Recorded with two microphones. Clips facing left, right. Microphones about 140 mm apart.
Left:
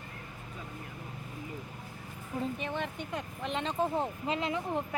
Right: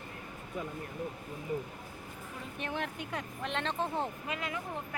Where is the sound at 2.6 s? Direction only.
Centre (ahead or behind).